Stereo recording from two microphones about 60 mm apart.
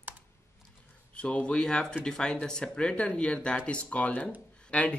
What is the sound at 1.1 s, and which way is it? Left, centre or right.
Speech, centre.